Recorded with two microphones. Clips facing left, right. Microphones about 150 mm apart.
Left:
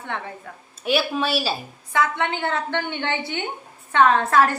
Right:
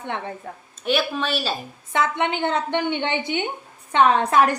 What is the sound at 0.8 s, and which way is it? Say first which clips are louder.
Speech: left 1 dB; 10° left (ahead or behind).